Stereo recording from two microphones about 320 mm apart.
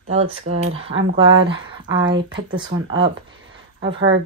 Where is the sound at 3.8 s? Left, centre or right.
Right.